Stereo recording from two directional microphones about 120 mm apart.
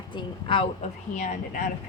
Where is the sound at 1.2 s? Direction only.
90° left.